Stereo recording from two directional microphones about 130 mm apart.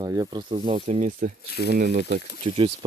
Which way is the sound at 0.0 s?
30° right (ahead or behind).